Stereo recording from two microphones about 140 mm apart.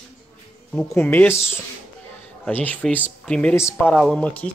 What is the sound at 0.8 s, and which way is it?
Speech, 15° left (ahead or behind).